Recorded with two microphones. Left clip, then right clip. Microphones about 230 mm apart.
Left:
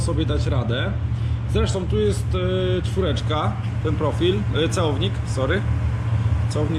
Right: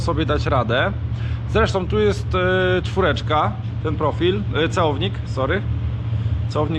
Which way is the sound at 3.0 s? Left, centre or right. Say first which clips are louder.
Right 7 dB; centre.